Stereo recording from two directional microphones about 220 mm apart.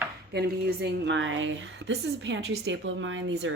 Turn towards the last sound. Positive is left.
turn(degrees=-60)  # may be behind; listen again after turning